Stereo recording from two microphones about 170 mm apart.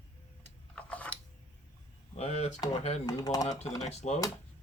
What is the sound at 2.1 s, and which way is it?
Speech, 40° left (ahead or behind).